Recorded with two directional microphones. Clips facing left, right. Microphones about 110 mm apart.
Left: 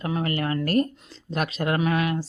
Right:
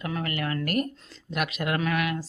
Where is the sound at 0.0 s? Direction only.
30° left (ahead or behind).